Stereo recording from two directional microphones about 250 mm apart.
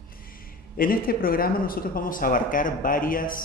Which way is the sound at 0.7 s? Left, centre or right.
Left.